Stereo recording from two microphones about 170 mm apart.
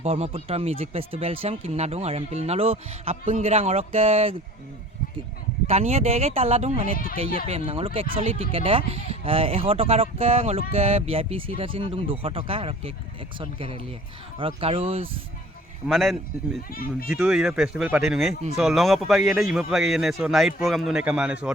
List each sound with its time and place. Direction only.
0.0 s speech: 35° right (ahead or behind)
5.6 s speech: 35° right (ahead or behind)
6.9 s speech: 60° left (ahead or behind)
7.4 s speech: 35° right (ahead or behind)
15.9 s a man's voice: centre (ahead or behind)